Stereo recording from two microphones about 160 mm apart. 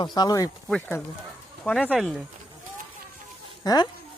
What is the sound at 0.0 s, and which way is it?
Speech, 25° left (ahead or behind).